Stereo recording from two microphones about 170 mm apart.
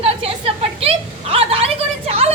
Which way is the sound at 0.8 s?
35° right (ahead or behind).